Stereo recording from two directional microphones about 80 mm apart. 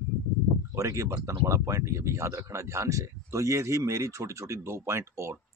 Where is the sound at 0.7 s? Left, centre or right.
Right.